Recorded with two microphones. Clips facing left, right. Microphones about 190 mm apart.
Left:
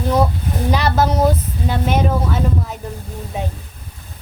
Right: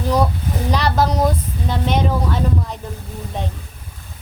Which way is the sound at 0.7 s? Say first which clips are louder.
Left 1 dB; 5° left (ahead or behind).